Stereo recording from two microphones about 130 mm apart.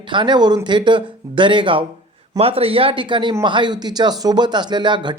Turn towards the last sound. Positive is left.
turn(degrees=-35)  # may be behind; listen again after turning